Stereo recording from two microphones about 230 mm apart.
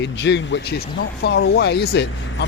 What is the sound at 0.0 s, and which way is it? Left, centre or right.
Speech, left.